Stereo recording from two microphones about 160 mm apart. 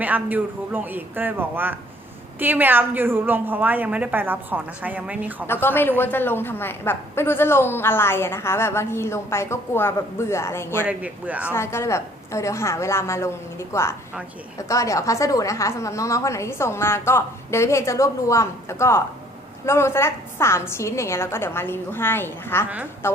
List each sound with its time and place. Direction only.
0.0 s a woman's voice: 10° right (ahead or behind)
5.5 s a woman's voice: 15° left (ahead or behind)
10.8 s a woman's voice: 10° right (ahead or behind)
11.5 s a woman's voice: 15° left (ahead or behind)